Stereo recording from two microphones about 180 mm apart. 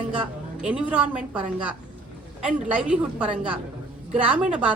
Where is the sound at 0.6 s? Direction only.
5° right (ahead or behind).